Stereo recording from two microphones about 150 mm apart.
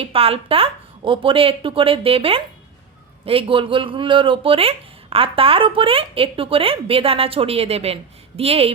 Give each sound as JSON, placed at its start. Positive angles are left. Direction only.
{"t": 0.0, "sound": "speech", "side_deg": -40}